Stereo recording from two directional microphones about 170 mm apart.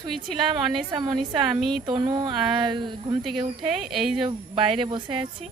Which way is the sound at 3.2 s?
Centre (ahead or behind).